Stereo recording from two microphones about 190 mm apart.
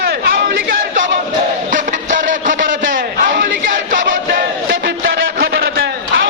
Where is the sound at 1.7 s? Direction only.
45° right (ahead or behind).